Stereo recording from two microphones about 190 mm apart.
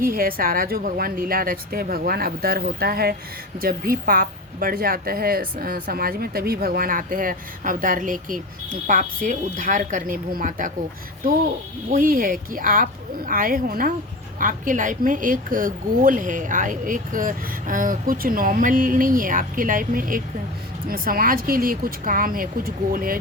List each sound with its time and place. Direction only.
0.0 s a woman's voice: 50° right (ahead or behind)
11.9 s a woman's voice: 45° right (ahead or behind)